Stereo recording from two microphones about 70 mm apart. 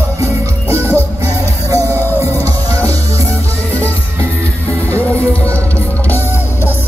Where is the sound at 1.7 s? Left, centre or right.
Right.